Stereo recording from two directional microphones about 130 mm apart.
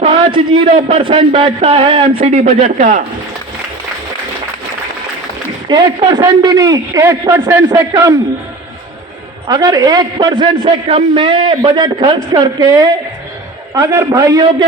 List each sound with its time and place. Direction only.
0.0 s speech: 45° right (ahead or behind); by 3.0 s 75° right (ahead or behind)
5.6 s a man's voice: 35° right (ahead or behind)
9.5 s a man's voice: 30° right (ahead or behind)